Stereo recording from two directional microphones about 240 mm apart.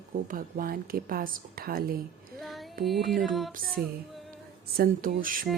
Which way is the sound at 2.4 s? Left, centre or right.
Centre.